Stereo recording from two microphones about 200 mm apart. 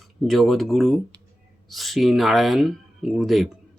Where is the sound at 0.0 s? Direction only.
Centre (ahead or behind).